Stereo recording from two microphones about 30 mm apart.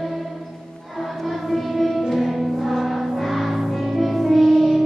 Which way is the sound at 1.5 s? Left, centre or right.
Centre.